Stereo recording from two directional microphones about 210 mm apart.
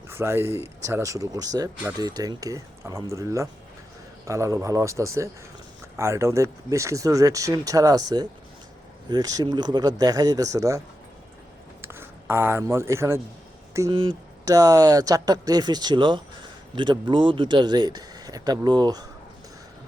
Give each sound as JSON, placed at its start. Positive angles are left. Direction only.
{"t": 0.2, "sound": "speech", "side_deg": -10}
{"t": 9.0, "sound": "speech", "side_deg": -20}